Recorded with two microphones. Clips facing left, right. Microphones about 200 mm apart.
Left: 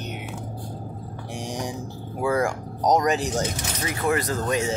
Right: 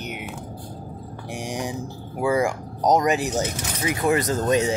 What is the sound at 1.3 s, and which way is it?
Speech, 10° right (ahead or behind).